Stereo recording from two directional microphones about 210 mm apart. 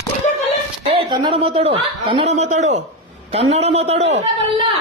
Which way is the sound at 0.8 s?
25° right (ahead or behind).